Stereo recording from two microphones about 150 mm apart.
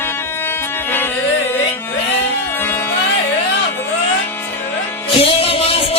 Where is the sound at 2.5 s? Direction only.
15° left (ahead or behind).